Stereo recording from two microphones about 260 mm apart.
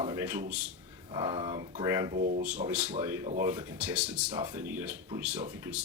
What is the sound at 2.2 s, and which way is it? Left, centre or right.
Speech, right.